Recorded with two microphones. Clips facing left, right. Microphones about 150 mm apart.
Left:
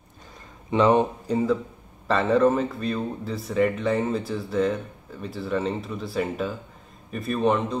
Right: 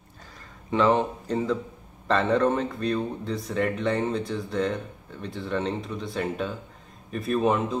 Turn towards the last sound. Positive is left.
turn(degrees=0)  # may be behind; listen again after turning